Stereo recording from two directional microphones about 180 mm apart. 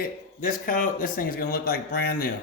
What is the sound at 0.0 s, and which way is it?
Speech, 50° left (ahead or behind).